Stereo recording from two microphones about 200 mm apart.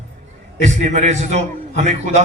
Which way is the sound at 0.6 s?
35° right (ahead or behind).